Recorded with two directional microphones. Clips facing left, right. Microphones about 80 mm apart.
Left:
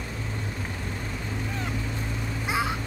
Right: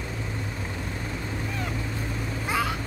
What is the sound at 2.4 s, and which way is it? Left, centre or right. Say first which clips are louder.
Vehicle: even; centre.